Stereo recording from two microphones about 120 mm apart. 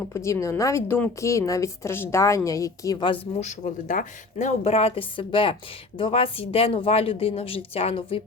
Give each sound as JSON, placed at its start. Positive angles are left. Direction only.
{"t": 0.1, "sound": "a woman's voice", "side_deg": 25}
{"t": 3.4, "sound": "a woman's voice", "side_deg": 85}